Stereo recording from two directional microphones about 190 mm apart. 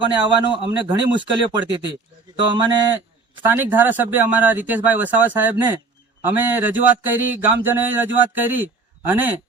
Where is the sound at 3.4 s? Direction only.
10° right (ahead or behind).